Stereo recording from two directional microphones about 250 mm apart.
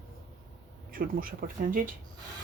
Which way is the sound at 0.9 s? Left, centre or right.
Right.